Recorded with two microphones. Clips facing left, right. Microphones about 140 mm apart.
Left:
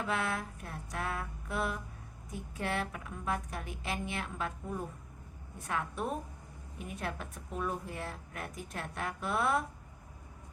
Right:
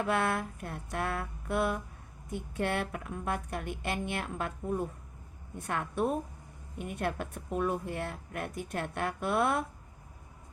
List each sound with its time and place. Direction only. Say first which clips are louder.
0.0 s a woman's voice: right 5 dB; 60° right (ahead or behind)